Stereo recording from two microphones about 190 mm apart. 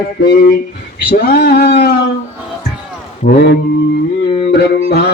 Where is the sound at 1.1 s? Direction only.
55° left (ahead or behind).